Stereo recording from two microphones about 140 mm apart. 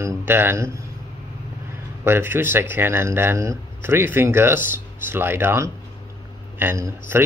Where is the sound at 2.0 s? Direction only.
15° right (ahead or behind).